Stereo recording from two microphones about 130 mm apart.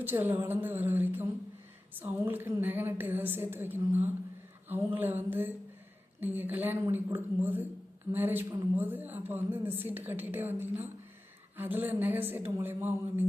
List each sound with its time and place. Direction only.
0.0 s speech: 15° right (ahead or behind)